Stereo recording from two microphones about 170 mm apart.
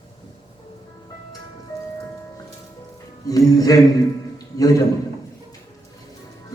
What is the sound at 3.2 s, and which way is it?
Music, 20° left (ahead or behind).